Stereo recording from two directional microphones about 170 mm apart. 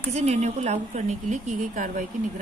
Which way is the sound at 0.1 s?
40° right (ahead or behind).